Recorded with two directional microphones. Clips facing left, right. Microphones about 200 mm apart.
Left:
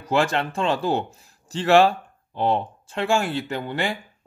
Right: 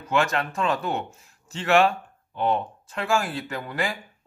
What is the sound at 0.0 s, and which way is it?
Speech, 30° left (ahead or behind).